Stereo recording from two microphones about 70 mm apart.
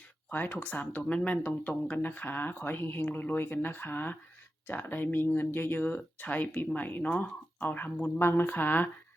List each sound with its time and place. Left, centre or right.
0.3 s speech: left